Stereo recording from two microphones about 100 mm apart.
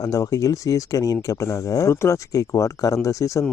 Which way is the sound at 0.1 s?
35° left (ahead or behind).